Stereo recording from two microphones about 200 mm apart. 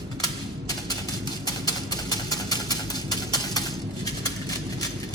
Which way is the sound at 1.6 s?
20° left (ahead or behind).